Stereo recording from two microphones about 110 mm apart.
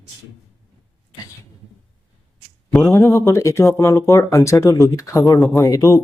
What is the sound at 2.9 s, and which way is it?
Speech, 25° left (ahead or behind).